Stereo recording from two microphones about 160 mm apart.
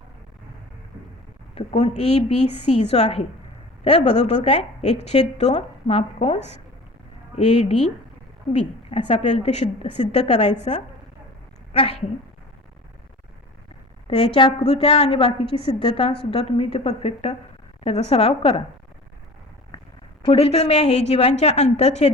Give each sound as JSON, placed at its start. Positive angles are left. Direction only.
{"t": 1.5, "sound": "a woman's voice", "side_deg": 45}
{"t": 14.1, "sound": "a woman's voice", "side_deg": 35}
{"t": 20.2, "sound": "a woman's voice", "side_deg": 40}